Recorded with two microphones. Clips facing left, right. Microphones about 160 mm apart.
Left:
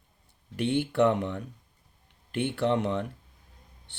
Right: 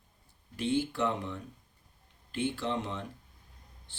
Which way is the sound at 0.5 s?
65° left (ahead or behind).